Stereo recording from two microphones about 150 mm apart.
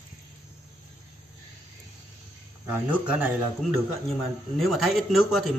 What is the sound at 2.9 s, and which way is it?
Mantra, 10° right (ahead or behind).